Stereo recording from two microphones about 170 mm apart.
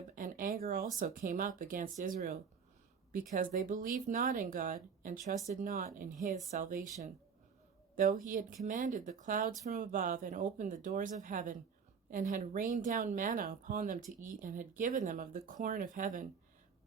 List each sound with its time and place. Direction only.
0.2 s a sound: 50° right (ahead or behind)
0.9 s speech: 55° right (ahead or behind)
7.9 s speech: 50° right (ahead or behind)